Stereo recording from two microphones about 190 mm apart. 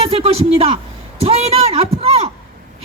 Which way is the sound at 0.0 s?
30° right (ahead or behind).